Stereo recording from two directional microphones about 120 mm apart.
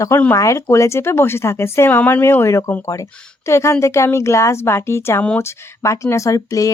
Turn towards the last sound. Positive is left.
turn(degrees=25)  # may be behind; listen again after turning